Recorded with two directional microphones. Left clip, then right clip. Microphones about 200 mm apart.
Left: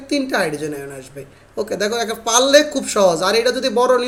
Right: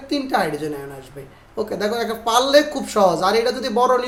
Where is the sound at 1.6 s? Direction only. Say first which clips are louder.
Left 2 dB; 20° left (ahead or behind).